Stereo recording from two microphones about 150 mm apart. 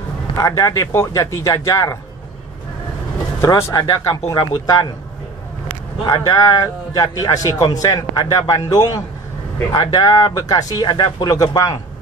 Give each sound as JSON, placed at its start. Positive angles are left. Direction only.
{"t": 0.4, "sound": "speech", "side_deg": 20}
{"t": 3.3, "sound": "speech", "side_deg": 20}
{"t": 6.0, "sound": "speech", "side_deg": 25}